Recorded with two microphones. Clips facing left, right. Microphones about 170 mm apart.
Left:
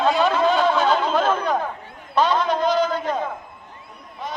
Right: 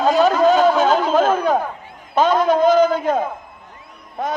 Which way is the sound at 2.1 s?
45° right (ahead or behind).